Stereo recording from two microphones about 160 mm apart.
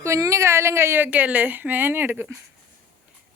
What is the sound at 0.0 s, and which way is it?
A woman's voice, 20° right (ahead or behind).